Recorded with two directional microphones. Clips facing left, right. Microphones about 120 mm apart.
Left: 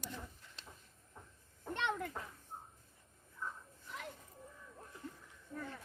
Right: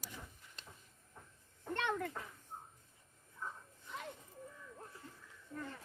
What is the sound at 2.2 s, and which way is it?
Speech, 10° left (ahead or behind).